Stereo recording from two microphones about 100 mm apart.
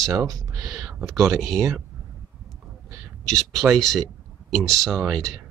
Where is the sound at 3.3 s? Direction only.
Centre (ahead or behind).